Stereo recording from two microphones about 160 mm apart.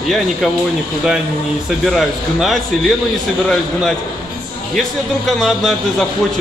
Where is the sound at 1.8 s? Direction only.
Centre (ahead or behind).